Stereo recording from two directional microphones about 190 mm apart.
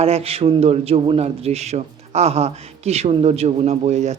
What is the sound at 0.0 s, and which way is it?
Speech, 30° right (ahead or behind).